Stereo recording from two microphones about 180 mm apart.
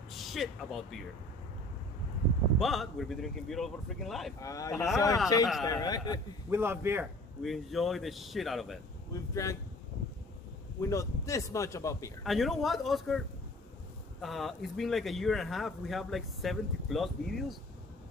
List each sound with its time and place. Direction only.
0.3 s speech: centre (ahead or behind)
2.6 s speech: centre (ahead or behind)
4.4 s a man's voice: 20° left (ahead or behind)
6.5 s a man's voice: 10° right (ahead or behind)
7.4 s speech: centre (ahead or behind)
9.1 s speech: 15° left (ahead or behind)
10.8 s speech: 15° left (ahead or behind)
12.2 s speech: centre (ahead or behind)
14.2 s speech: centre (ahead or behind)